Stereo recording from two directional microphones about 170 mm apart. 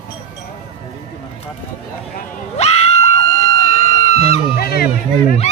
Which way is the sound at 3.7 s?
40° left (ahead or behind).